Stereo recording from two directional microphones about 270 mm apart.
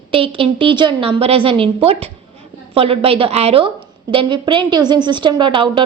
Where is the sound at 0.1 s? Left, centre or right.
Centre.